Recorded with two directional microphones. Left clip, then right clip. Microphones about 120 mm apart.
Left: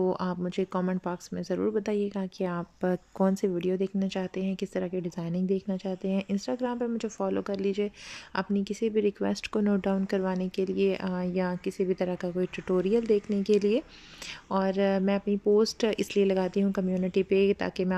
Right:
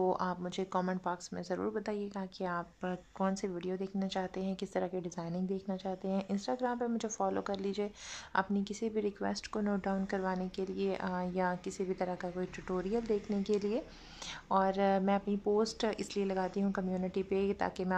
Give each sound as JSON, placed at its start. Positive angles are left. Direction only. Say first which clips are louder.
{"t": 0.0, "sound": "speech", "louder": "left 4 dB", "side_deg": 10}
{"t": 2.8, "sound": "speech", "louder": "left 8 dB", "side_deg": 40}
{"t": 3.3, "sound": "speech", "louder": "left 10 dB", "side_deg": 25}